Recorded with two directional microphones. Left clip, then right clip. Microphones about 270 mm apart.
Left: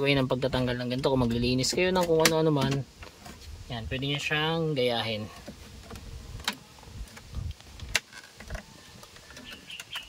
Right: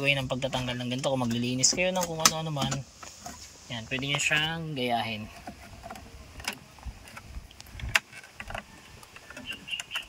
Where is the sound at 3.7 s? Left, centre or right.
Centre.